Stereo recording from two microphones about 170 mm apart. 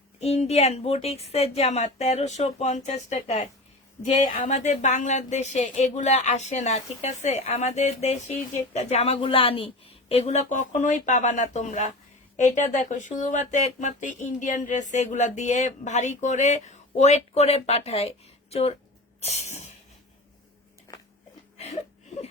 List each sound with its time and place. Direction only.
0.2 s speech: 40° left (ahead or behind)
19.2 s speech: 40° left (ahead or behind)